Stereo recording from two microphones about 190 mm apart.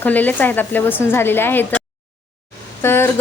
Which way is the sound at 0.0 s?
10° left (ahead or behind).